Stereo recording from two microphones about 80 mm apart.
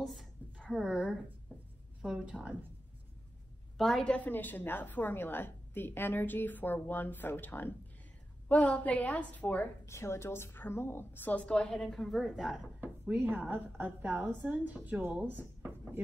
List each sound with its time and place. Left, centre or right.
0.0 s a sound: centre
0.7 s a woman's voice: centre
2.0 s a woman's voice: centre
3.7 s a woman's voice: centre; by 9.7 s left
9.8 s a woman's voice: left; by 12.5 s centre
13.1 s a woman's voice: right